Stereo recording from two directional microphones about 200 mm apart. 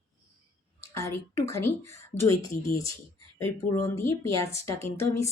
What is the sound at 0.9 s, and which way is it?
Speech, 15° left (ahead or behind).